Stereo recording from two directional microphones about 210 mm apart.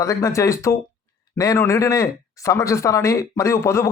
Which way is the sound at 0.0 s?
15° left (ahead or behind).